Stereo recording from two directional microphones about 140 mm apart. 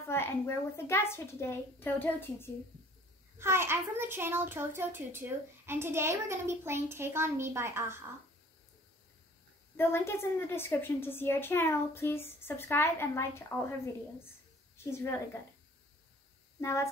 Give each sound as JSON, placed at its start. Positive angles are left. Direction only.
{"t": 0.1, "sound": "a woman's voice", "side_deg": 20}
{"t": 3.3, "sound": "a child's voice", "side_deg": -20}
{"t": 9.8, "sound": "a woman's voice", "side_deg": 15}
{"t": 14.9, "sound": "a woman's voice", "side_deg": 20}
{"t": 16.6, "sound": "a woman's voice", "side_deg": 20}